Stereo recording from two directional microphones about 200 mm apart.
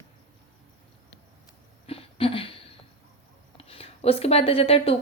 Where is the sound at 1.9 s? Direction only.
30° left (ahead or behind).